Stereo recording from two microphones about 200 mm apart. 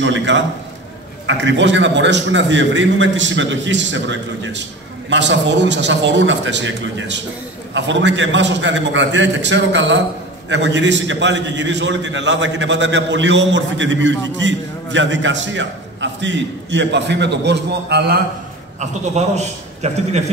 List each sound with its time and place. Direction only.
0.0 s a man's voice: 65° right (ahead or behind)
18.8 s a man's voice: 35° right (ahead or behind)